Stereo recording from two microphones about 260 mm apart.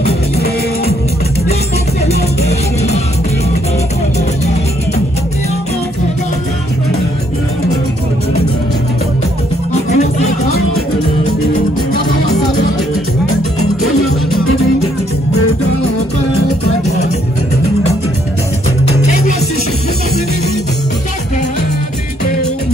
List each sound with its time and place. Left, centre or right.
0.0 s music: left
9.8 s music: left